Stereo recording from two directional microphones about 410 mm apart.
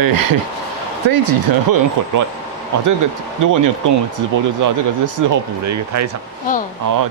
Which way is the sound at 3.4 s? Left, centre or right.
Right.